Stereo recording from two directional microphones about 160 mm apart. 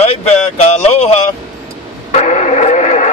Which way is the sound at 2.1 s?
50° left (ahead or behind).